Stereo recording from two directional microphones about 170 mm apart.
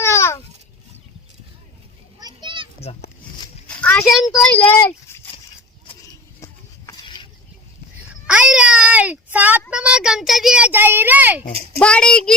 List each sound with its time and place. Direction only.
0.0 s babbling: 15° left (ahead or behind)
2.2 s children playing: 25° right (ahead or behind)
3.8 s a sound: 10° left (ahead or behind)
4.5 s speech: 10° left (ahead or behind)
6.4 s a sound: 20° left (ahead or behind)
8.3 s speech: 5° right (ahead or behind)
11.8 s a child's voice: 5° left (ahead or behind)